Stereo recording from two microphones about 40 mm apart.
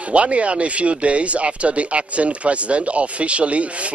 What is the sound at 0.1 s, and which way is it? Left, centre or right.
Speech, right.